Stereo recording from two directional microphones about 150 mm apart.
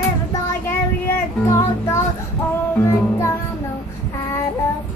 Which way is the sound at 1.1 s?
20° left (ahead or behind).